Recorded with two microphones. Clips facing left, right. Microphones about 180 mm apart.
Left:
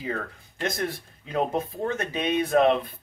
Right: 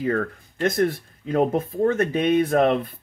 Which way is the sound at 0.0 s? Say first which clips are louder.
Right 8 dB; 50° right (ahead or behind).